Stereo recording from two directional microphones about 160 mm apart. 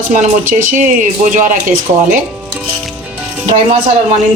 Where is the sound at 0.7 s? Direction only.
55° right (ahead or behind).